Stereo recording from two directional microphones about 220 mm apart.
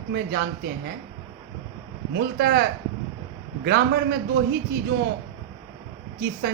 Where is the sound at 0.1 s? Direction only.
50° right (ahead or behind).